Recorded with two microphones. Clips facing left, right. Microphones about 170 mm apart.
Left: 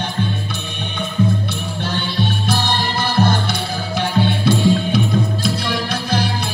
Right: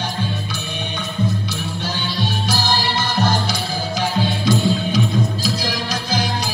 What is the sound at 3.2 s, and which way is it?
Music, 60° left (ahead or behind).